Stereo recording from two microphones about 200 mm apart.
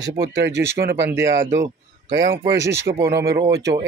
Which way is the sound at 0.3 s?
60° right (ahead or behind).